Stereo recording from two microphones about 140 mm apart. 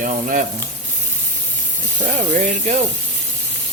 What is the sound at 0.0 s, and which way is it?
Frying, 80° right.